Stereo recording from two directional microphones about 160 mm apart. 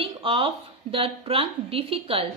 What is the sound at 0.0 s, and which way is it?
A woman's voice, 35° right (ahead or behind).